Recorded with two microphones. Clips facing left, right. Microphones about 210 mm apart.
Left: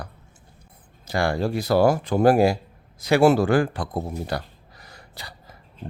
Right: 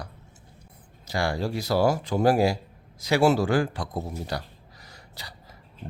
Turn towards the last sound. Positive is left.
turn(degrees=55)  # may be behind; listen again after turning